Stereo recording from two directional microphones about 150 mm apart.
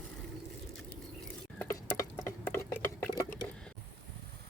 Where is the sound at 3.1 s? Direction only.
25° left (ahead or behind).